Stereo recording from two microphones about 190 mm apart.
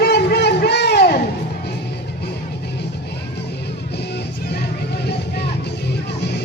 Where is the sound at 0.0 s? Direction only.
60° left (ahead or behind).